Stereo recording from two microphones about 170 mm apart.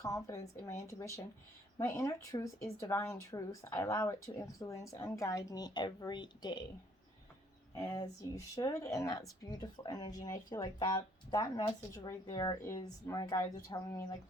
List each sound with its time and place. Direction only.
0.0 s speech: 20° left (ahead or behind)
7.8 s speech: 20° left (ahead or behind)